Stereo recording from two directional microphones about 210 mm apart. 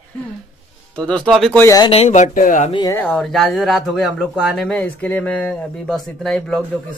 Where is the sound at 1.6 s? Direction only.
15° left (ahead or behind).